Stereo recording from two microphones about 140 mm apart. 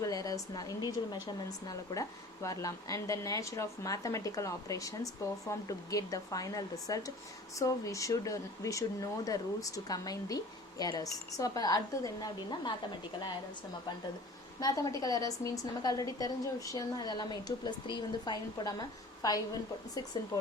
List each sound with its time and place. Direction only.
0.0 s speech: 25° left (ahead or behind)
14.6 s speech: 25° left (ahead or behind)